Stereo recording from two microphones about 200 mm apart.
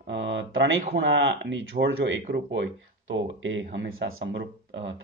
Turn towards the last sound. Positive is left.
turn(degrees=-65)  # may be behind; listen again after turning